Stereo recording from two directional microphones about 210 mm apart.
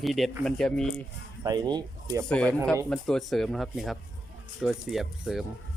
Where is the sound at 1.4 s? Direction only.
20° right (ahead or behind).